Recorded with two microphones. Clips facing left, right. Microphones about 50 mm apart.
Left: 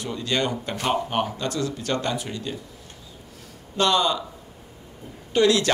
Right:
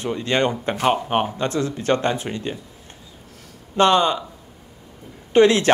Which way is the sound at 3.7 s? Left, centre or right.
Right.